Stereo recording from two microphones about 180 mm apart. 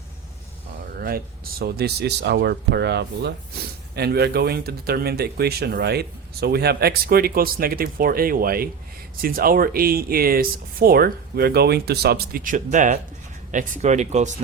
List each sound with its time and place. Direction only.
0.9 s speech: 55° right (ahead or behind); by 14.3 s 40° right (ahead or behind)